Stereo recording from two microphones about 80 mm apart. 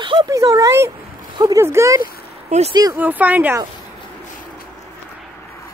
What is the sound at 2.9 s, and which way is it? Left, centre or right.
Speech, right.